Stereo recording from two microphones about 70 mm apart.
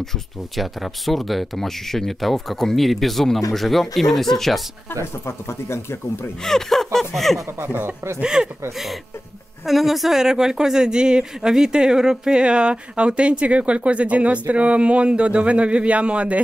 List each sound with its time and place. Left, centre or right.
0.6 s speech: centre
5.2 s speech: left
6.4 s speech: centre
7.6 s speech: right
8.2 s speech: centre
9.7 s speech: centre